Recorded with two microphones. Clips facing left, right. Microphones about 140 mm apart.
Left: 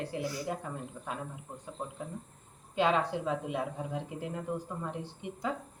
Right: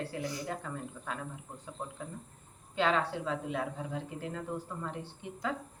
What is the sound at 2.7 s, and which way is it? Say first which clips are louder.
A woman's voice: left 2 dB; 15° left (ahead or behind).